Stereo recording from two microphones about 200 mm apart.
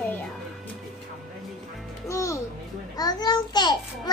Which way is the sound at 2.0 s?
15° left (ahead or behind).